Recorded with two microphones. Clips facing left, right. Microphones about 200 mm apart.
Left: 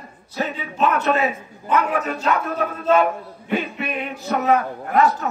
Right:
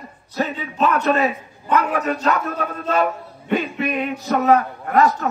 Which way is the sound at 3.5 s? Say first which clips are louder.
Right 3 dB; 40° right (ahead or behind).